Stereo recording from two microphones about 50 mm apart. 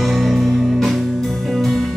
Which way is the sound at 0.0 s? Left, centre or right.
Centre.